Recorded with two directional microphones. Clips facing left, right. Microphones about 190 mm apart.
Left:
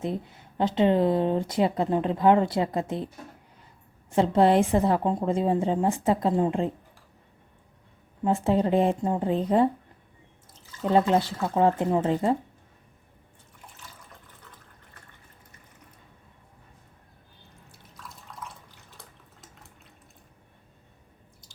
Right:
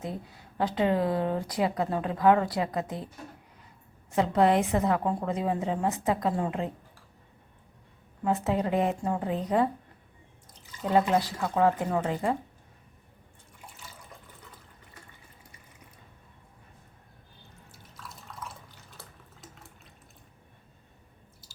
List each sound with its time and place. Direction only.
0.0 s speech: 25° left (ahead or behind)
4.1 s speech: 30° left (ahead or behind)
8.2 s speech: 30° left (ahead or behind)
11.5 s speech: 25° left (ahead or behind)
18.3 s water: centre (ahead or behind)